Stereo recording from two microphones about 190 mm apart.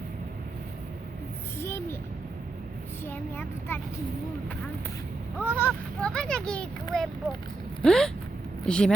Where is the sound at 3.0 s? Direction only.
10° left (ahead or behind).